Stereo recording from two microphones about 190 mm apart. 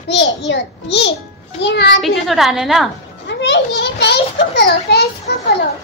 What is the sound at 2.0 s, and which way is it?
Speech, centre (ahead or behind).